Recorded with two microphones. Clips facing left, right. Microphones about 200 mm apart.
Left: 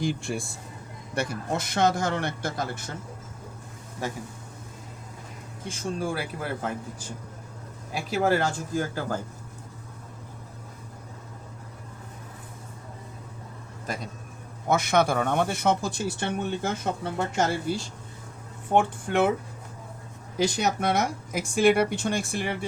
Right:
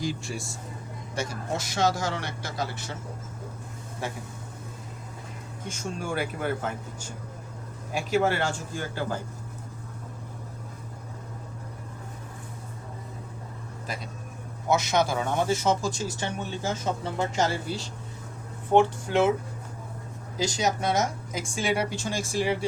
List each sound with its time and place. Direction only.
0.0 s speech: 55° left (ahead or behind)
5.6 s speech: 30° left (ahead or behind)
8.1 s speech: 40° left (ahead or behind)
14.7 s speech: 55° left (ahead or behind)
20.4 s speech: 60° left (ahead or behind)